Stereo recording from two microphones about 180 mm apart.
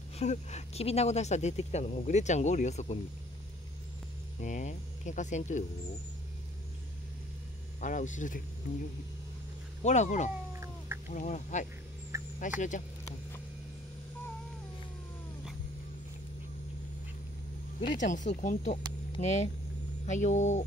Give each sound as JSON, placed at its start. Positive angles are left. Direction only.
{"t": 0.2, "sound": "speech", "side_deg": 40}
{"t": 4.4, "sound": "speech", "side_deg": 45}
{"t": 7.8, "sound": "speech", "side_deg": 45}
{"t": 9.8, "sound": "speech", "side_deg": 40}
{"t": 10.5, "sound": "a sound", "side_deg": -15}
{"t": 11.1, "sound": "speech", "side_deg": 45}
{"t": 17.8, "sound": "speech", "side_deg": 45}